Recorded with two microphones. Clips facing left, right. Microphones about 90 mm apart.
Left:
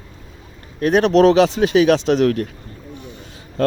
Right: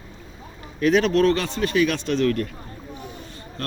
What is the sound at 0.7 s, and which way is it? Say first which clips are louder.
Speech: left 4 dB; 55° left (ahead or behind).